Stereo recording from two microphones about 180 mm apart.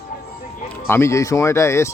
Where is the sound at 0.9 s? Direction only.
15° left (ahead or behind).